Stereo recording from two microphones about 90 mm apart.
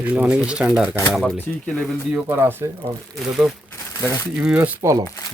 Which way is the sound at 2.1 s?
15° right (ahead or behind).